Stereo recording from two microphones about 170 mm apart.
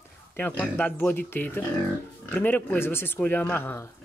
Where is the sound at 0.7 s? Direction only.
10° left (ahead or behind).